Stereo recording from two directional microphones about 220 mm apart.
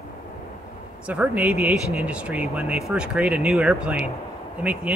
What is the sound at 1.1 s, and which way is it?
A man's voice, 5° right (ahead or behind).